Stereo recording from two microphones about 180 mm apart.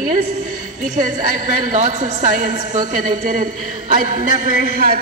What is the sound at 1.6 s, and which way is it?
A woman's voice, 45° right (ahead or behind).